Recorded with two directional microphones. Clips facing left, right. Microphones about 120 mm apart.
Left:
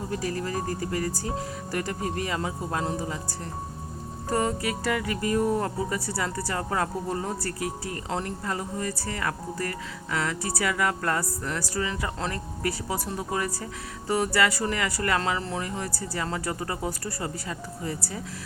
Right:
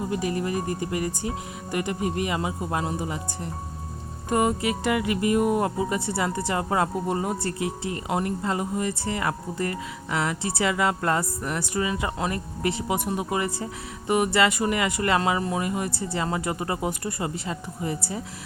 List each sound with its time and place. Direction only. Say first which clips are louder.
0.1 s speech: right 1 dB; 15° right (ahead or behind)
4.3 s speech: right 3 dB; 20° right (ahead or behind)